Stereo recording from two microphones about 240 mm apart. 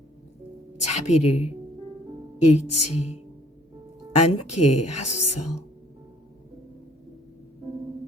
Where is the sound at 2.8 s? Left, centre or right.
Left.